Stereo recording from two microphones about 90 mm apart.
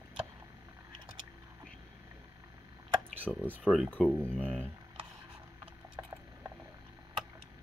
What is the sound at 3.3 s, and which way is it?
Speech, 10° left (ahead or behind).